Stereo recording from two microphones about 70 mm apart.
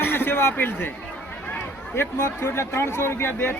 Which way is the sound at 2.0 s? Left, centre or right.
Left.